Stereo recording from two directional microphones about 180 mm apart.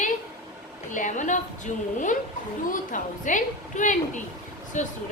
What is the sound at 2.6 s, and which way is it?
A woman's voice, 50° left (ahead or behind).